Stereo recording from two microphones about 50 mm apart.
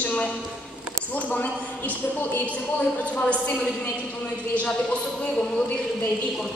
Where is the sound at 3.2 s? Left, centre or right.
Left.